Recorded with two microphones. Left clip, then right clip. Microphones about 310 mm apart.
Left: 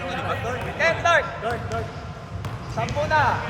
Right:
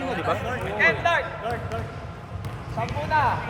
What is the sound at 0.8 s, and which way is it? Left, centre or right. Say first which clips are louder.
Basketball bounce: left 2 dB; centre.